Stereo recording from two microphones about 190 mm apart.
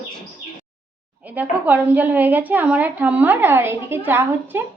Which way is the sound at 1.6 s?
10° right (ahead or behind).